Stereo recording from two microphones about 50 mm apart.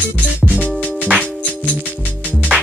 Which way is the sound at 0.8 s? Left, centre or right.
Centre.